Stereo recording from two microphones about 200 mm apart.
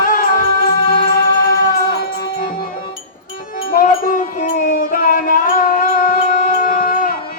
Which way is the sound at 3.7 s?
45° left (ahead or behind).